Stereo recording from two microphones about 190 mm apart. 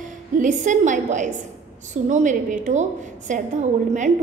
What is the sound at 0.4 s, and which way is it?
Child singing, 40° right (ahead or behind).